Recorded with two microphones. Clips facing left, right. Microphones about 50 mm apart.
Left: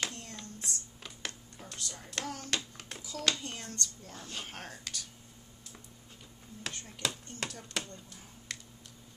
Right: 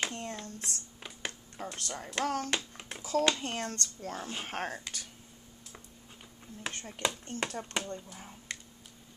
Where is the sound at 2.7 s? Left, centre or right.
Centre.